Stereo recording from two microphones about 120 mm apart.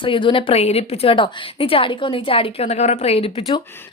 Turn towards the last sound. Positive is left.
turn(degrees=55)  # may be behind; listen again after turning